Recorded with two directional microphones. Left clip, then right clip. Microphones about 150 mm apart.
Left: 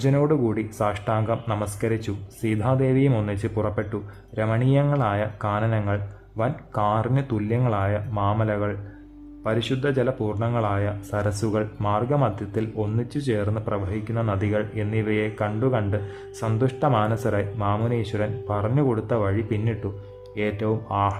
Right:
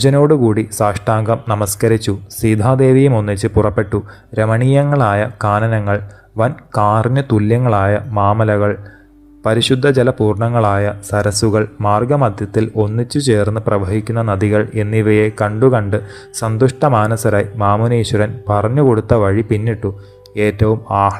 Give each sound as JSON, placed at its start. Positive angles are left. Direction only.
{"t": 0.0, "sound": "speech", "side_deg": -35}